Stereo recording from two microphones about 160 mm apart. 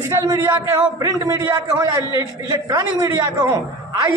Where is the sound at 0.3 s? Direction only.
15° right (ahead or behind).